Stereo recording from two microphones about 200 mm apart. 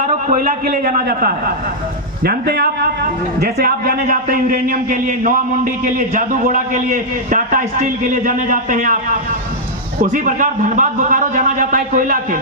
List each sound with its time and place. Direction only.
0.0 s a man's voice: 40° right (ahead or behind)
10.0 s a man's voice: 40° right (ahead or behind)